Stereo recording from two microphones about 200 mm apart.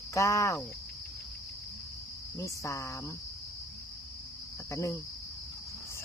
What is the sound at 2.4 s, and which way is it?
Speech, 15° left (ahead or behind).